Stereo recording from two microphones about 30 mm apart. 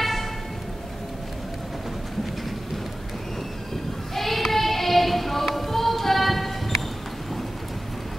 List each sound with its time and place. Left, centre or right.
0.0 s vehicle: centre
4.1 s child singing: centre